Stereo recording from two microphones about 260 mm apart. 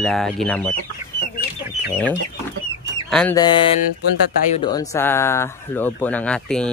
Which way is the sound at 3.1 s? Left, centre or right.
Centre.